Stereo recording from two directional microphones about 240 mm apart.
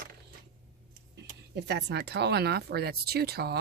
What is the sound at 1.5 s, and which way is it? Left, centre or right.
Speech, right.